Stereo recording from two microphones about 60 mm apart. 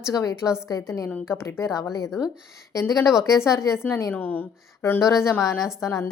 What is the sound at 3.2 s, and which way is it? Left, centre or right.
Speech, left.